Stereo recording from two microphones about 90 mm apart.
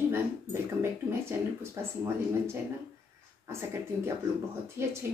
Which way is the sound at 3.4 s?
30° right (ahead or behind).